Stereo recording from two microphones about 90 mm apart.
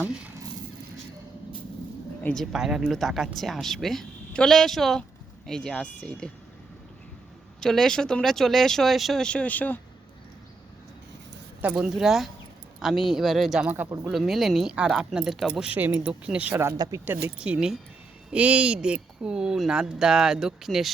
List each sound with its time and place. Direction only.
2.3 s speech: centre (ahead or behind)
7.6 s speech: 5° left (ahead or behind)
9.2 s speech: 15° left (ahead or behind)
11.6 s speech: 10° right (ahead or behind)
15.6 s speech: 20° right (ahead or behind)
16.7 s speech: 50° right (ahead or behind)
17.1 s speech: 15° right (ahead or behind); by 20.9 s centre (ahead or behind)